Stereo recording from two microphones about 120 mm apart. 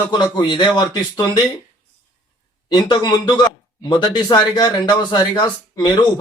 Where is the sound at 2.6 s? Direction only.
40° left (ahead or behind).